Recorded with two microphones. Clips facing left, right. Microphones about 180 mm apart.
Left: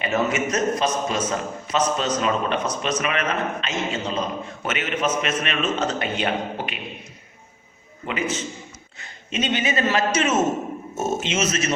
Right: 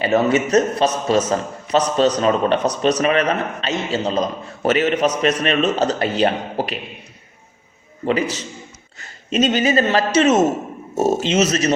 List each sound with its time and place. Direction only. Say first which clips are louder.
0.0 s a man's voice: right 6 dB; 35° right (ahead or behind)
8.0 s a man's voice: right 6 dB; 35° right (ahead or behind)